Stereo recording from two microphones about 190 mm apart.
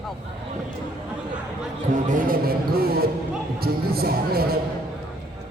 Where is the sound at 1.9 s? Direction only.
45° right (ahead or behind).